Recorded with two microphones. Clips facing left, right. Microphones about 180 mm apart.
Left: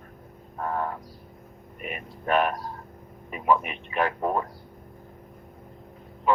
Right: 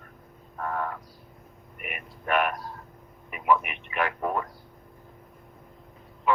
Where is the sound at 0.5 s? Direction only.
25° left (ahead or behind).